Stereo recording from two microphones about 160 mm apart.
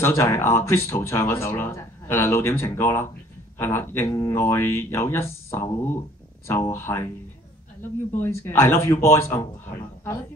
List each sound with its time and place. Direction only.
0.0 s speech: 15° left (ahead or behind)